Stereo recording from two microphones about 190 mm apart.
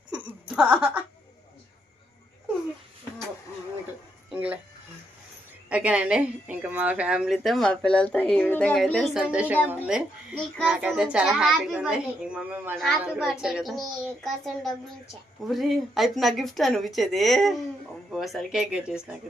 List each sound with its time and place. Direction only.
0.1 s a sound: 5° right (ahead or behind)
4.3 s music: 10° right (ahead or behind)
5.6 s a woman's voice: 5° right (ahead or behind)